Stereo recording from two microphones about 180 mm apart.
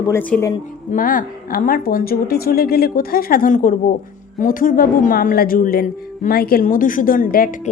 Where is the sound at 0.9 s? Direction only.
50° left (ahead or behind).